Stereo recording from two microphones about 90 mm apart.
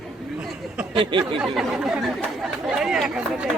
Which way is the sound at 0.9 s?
65° right (ahead or behind).